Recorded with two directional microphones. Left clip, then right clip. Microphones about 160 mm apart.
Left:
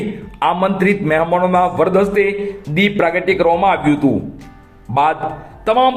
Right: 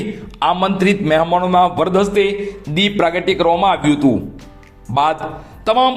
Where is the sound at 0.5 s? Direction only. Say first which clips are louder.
Left 1 dB; 25° right (ahead or behind).